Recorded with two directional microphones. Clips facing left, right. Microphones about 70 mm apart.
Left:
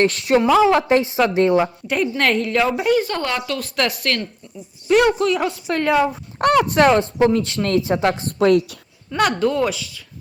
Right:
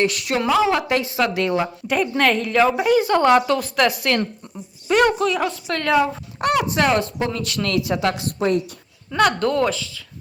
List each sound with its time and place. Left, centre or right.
0.0 s a woman's voice: left
1.9 s a woman's voice: centre
3.2 s speech: right
3.6 s a woman's voice: centre
6.4 s speech: left
6.8 s a woman's voice: left
8.4 s a woman's voice: left
9.1 s a woman's voice: centre